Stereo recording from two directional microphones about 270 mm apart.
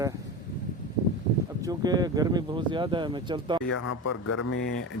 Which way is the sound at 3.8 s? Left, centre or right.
Left.